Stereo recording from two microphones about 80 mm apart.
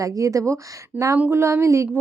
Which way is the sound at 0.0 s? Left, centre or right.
Right.